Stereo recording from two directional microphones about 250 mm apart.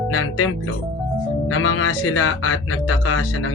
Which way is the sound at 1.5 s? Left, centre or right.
Left.